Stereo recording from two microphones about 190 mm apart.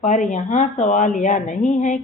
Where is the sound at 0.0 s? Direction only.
40° left (ahead or behind).